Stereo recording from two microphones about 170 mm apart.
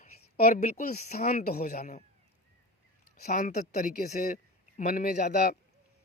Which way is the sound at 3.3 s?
50° left (ahead or behind).